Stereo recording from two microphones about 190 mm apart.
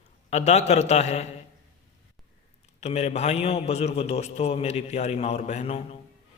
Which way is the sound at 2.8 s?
35° left (ahead or behind).